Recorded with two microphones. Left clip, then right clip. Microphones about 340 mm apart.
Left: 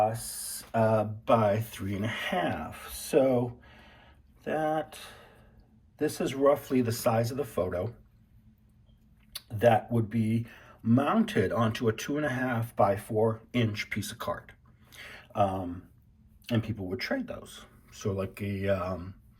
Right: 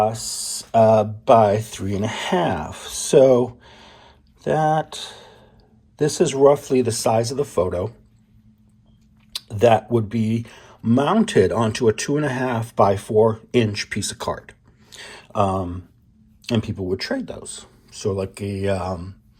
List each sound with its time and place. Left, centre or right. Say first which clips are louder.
0.7 s speech: right 12 dB; centre
9.3 s speech: right 8 dB; centre
16.5 s speech: right 9 dB; centre